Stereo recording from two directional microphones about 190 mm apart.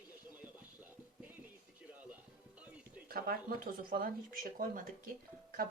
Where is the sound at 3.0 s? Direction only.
50° right (ahead or behind).